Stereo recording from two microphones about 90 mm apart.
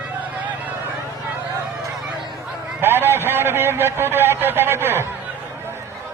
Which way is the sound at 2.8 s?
25° right (ahead or behind).